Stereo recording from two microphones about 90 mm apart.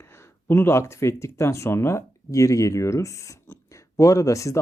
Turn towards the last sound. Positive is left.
turn(degrees=35)  # may be behind; listen again after turning